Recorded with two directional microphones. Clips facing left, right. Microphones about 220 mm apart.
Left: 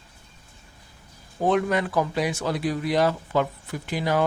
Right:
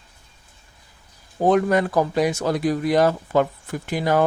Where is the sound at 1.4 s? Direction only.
40° right (ahead or behind).